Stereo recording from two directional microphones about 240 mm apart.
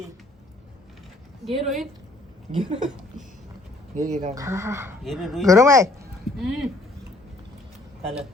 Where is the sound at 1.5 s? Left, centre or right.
Centre.